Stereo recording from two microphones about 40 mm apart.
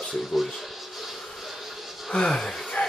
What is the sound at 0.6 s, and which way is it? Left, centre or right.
Music, centre.